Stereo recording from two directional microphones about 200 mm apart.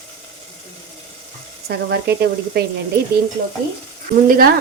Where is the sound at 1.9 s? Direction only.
55° right (ahead or behind).